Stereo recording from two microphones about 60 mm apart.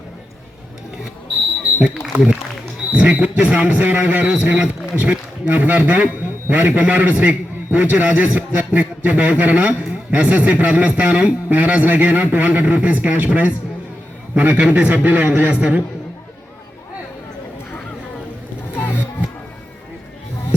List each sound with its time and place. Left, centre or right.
1.8 s a man's voice: centre
18.7 s music: left